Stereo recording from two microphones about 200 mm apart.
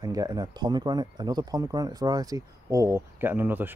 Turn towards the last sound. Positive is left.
turn(degrees=-10)  # may be behind; listen again after turning